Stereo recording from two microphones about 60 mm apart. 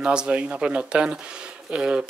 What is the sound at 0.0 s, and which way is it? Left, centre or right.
Speech, centre.